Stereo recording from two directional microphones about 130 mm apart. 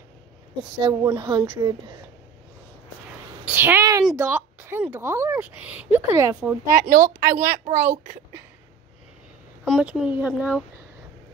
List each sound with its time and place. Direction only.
0.7 s speech: 35° right (ahead or behind)
3.1 s a sound: 15° right (ahead or behind)
4.2 s a woman's voice: 15° right (ahead or behind)
6.7 s a woman's voice: 90° right
7.5 s a woman's voice: 60° right (ahead or behind)
9.7 s a woman's voice: 5° right (ahead or behind)